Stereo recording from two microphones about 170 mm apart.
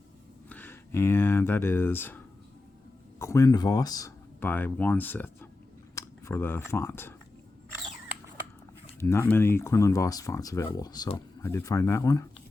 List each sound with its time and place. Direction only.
0.4 s speech: 10° left (ahead or behind)
9.0 s speech: 15° left (ahead or behind)